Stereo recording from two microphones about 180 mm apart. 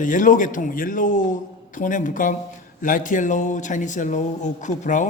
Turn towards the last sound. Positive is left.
turn(degrees=45)  # may be behind; listen again after turning